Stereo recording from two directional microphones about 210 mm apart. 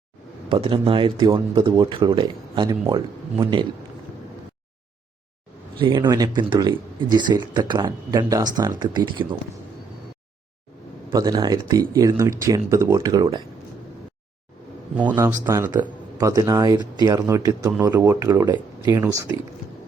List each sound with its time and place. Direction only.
0.4 s speech: 20° right (ahead or behind)
5.8 s speech: 20° right (ahead or behind)
11.1 s speech: 20° right (ahead or behind)
14.9 s speech: 10° right (ahead or behind)